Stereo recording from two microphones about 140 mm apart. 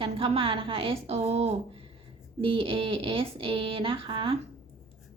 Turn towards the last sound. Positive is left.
turn(degrees=-40)  # may be behind; listen again after turning